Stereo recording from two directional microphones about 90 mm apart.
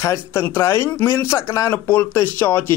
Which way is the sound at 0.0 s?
30° left (ahead or behind).